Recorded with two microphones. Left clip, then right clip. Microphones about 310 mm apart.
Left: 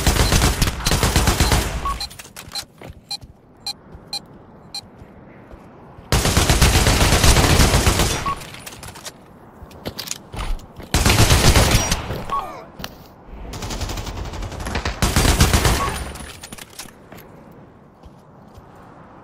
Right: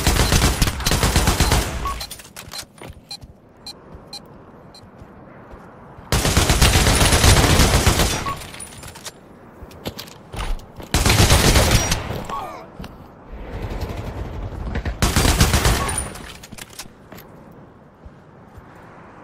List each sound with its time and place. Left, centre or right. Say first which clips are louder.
0.0 s fusillade: even; centre
3.7 s vehicle: left 7 dB; centre
6.0 s gunshot: left 1 dB; centre
9.9 s fusillade: left 2 dB; centre
13.7 s gunshot: left 3 dB; left
15.0 s gunshot: right 1 dB; centre